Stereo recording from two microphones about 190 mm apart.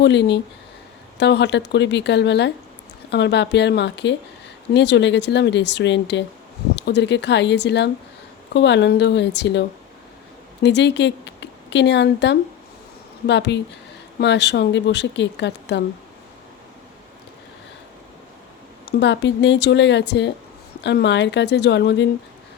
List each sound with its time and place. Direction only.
0.0 s a woman's voice: 65° left (ahead or behind)
18.9 s a woman's voice: 65° left (ahead or behind)